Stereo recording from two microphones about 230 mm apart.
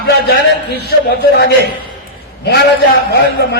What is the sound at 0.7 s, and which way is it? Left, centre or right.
Speech, left.